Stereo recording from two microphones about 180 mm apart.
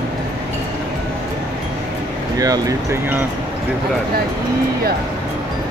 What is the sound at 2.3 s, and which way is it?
Speech, 20° right (ahead or behind).